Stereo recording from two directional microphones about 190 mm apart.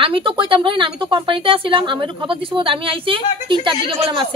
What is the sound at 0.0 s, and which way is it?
Speech, 25° right (ahead or behind).